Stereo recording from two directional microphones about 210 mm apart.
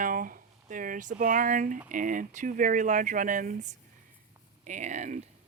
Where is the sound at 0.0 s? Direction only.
40° right (ahead or behind).